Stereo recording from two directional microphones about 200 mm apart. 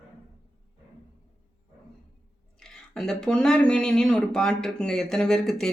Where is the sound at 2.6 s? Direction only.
5° left (ahead or behind).